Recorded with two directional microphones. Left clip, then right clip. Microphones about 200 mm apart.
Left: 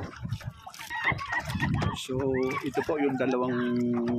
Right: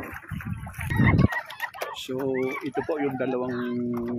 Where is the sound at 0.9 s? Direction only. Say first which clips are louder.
Right 3 dB; 25° right (ahead or behind).